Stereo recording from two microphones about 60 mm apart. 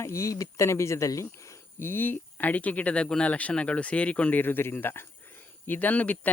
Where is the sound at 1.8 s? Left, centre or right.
Left.